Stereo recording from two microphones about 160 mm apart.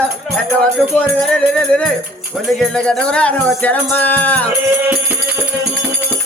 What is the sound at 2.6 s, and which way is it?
Music, 5° left (ahead or behind).